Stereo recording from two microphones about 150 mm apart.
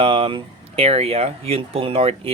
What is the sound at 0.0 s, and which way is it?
Speech, 40° right (ahead or behind).